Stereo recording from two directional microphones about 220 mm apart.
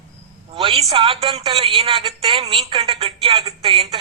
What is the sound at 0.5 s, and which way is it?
A man's voice, 25° right (ahead or behind).